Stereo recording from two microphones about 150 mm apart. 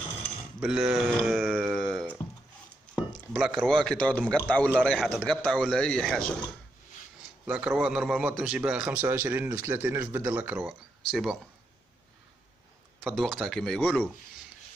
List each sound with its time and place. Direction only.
0.6 s speech: 5° right (ahead or behind)
1.7 s a sound: centre (ahead or behind)
3.1 s chop: centre (ahead or behind)
3.6 s speech: 5° left (ahead or behind)
7.4 s a man's voice: 10° right (ahead or behind)
13.0 s speech: centre (ahead or behind)